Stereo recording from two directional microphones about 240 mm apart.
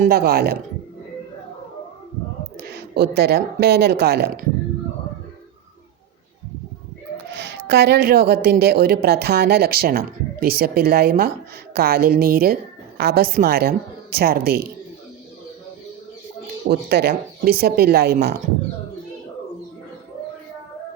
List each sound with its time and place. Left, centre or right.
0.0 s a woman's voice: right
2.6 s speech: right
7.3 s a woman's voice: right
16.6 s a woman's voice: right